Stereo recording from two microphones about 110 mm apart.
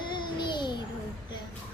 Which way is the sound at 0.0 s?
45° left (ahead or behind).